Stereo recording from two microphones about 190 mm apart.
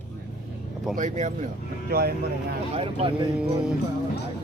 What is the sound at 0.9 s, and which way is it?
Speech, 40° right (ahead or behind).